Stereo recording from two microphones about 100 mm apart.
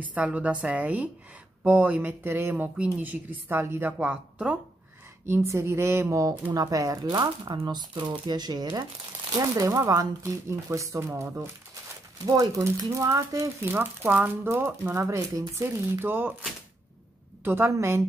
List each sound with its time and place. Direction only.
0.0 s speech: 15° right (ahead or behind)
4.0 s speech: 10° right (ahead or behind)
5.2 s speech: 25° right (ahead or behind)
7.6 s speech: 50° right (ahead or behind); by 13.5 s 30° right (ahead or behind)
13.7 s speech: 20° right (ahead or behind)